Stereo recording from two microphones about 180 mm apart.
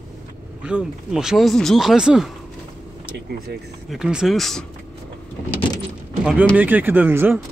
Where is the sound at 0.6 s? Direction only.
5° right (ahead or behind).